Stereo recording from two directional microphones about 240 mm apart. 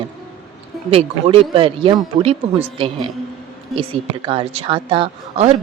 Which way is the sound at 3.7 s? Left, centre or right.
Right.